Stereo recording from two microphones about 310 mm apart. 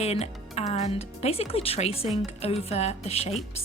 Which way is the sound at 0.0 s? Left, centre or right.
Centre.